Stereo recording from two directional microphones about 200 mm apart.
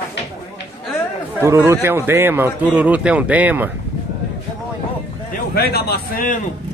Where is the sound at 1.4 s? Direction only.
15° right (ahead or behind).